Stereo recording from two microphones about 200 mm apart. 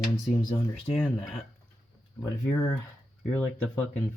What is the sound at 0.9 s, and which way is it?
Speech, 5° left (ahead or behind).